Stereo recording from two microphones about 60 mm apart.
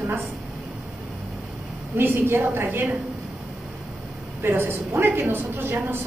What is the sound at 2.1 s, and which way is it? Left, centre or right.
Speech, right.